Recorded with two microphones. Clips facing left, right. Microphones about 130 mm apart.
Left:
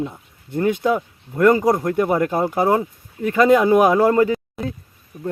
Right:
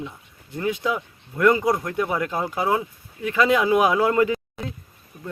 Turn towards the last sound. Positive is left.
turn(degrees=35)  # may be behind; listen again after turning